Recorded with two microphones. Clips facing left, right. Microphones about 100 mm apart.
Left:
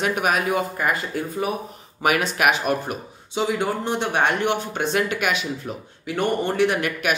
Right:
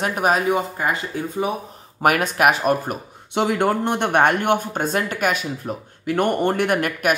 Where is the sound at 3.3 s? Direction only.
60° right (ahead or behind).